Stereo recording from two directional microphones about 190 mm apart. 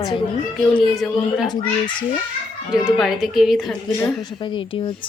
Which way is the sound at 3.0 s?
Centre (ahead or behind).